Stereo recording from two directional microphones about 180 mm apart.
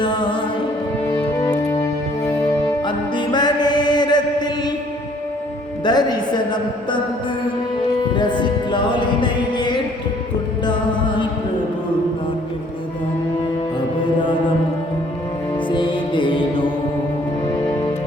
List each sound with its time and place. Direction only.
0.0 s music: 25° left (ahead or behind)
1.1 s music: 15° left (ahead or behind)
5.8 s music: 25° left (ahead or behind)
8.1 s music: 25° left (ahead or behind)
15.5 s music: 25° left (ahead or behind)